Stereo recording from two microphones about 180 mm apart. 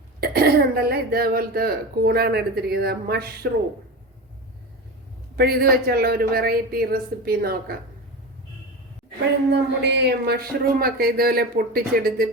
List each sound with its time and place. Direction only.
0.2 s speech: 60° right (ahead or behind)
5.4 s speech: 60° right (ahead or behind)
9.5 s speech: 70° right (ahead or behind); by 12.3 s 55° right (ahead or behind)